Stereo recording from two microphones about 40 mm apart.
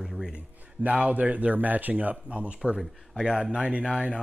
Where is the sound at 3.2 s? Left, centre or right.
Right.